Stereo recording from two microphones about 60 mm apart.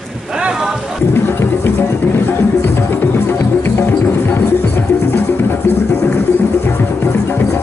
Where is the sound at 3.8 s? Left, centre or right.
Left.